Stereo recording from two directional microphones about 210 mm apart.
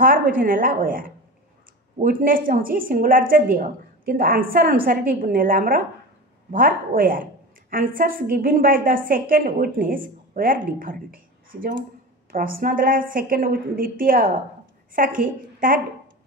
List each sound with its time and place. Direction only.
0.0 s a woman's voice: 40° right (ahead or behind)
12.3 s a woman's voice: 45° right (ahead or behind)